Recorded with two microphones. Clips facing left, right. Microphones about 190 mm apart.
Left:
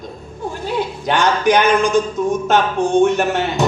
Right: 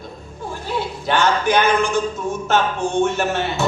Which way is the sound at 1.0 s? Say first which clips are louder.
Left 2 dB; 15° left (ahead or behind).